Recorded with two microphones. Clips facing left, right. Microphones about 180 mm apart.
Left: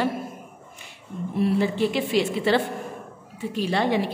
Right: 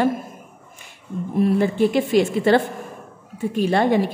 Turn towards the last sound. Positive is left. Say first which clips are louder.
# right 5 dB
turn(degrees=-50)  # may be behind; listen again after turning